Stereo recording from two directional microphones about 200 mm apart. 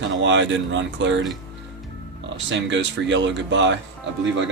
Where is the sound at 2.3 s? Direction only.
65° right (ahead or behind).